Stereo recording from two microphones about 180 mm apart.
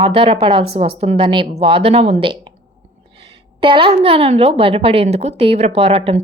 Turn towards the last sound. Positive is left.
turn(degrees=-35)  # may be behind; listen again after turning